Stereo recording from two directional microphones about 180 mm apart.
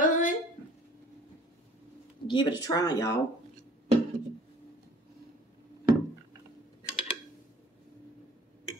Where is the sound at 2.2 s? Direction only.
25° left (ahead or behind).